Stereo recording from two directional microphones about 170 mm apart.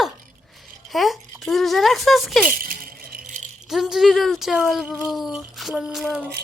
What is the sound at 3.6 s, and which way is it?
Speech, centre (ahead or behind).